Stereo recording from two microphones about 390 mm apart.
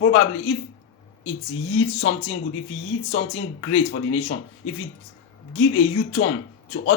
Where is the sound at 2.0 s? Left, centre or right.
Left.